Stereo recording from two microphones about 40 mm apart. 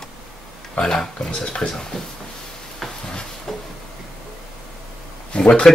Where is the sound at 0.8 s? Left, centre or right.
Centre.